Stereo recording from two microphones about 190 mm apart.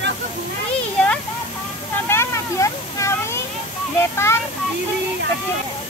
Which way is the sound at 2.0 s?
15° left (ahead or behind).